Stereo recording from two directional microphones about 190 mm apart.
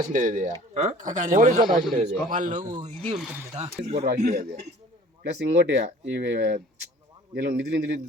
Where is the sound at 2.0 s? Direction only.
40° right (ahead or behind).